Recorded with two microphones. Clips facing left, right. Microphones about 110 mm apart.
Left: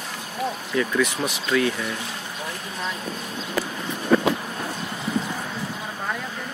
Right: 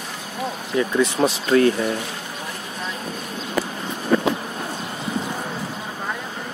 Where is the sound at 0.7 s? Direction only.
25° right (ahead or behind).